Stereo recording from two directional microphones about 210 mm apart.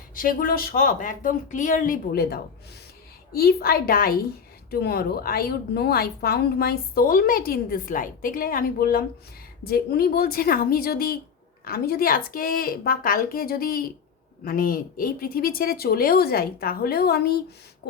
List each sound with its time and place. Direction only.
0.1 s a woman's voice: 40° left (ahead or behind)